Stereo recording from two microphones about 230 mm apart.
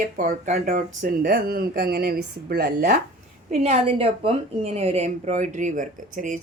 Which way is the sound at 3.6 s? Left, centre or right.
Right.